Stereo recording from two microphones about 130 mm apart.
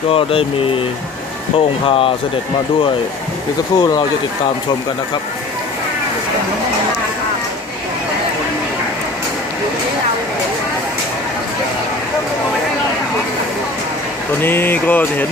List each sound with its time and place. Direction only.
0.1 s speech: 45° left (ahead or behind)
3.8 s speech: 30° left (ahead or behind)
14.4 s speech: 15° left (ahead or behind)